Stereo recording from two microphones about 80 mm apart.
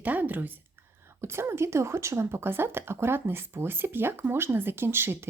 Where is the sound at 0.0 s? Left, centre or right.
Right.